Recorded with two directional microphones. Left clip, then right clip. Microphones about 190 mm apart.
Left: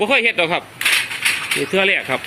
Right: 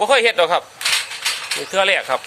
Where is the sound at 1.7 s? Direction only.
15° right (ahead or behind).